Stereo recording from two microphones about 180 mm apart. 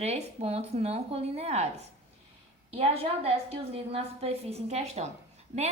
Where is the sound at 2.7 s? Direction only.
35° right (ahead or behind).